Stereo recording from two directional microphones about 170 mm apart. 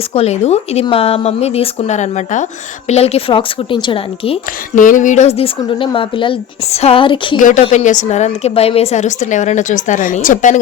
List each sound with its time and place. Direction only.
0.1 s speech: 40° left (ahead or behind)
4.7 s speech: 50° left (ahead or behind); by 7.3 s 30° left (ahead or behind)
7.6 s a woman's voice: 40° left (ahead or behind)